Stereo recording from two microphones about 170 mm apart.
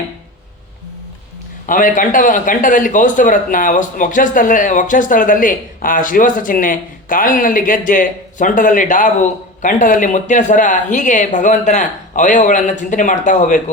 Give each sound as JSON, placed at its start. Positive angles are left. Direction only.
{"t": 1.6, "sound": "a man's voice", "side_deg": 50}